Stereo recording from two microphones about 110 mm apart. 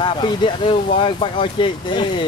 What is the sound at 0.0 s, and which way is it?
Speech, 45° left (ahead or behind).